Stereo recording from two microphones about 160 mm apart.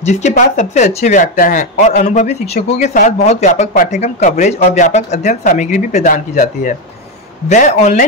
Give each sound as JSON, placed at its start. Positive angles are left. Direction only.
{"t": 0.0, "sound": "speech", "side_deg": 45}